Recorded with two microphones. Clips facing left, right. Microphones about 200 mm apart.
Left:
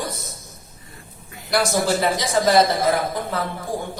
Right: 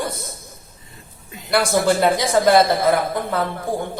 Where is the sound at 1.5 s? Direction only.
55° right (ahead or behind).